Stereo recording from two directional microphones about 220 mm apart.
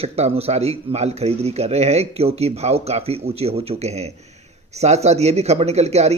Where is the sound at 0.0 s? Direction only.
30° right (ahead or behind).